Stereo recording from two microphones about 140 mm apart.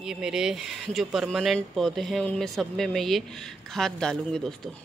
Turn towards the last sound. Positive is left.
turn(degrees=5)  # may be behind; listen again after turning